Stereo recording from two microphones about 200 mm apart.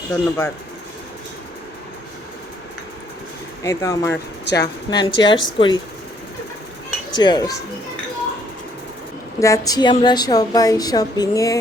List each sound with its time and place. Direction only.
0.1 s speech: 15° left (ahead or behind)
3.6 s speech: 15° left (ahead or behind)
4.1 s speech: 60° left (ahead or behind)
4.9 s a woman's voice: 20° left (ahead or behind)
7.2 s a woman's voice: 20° left (ahead or behind)
9.4 s a woman's voice: 15° left (ahead or behind)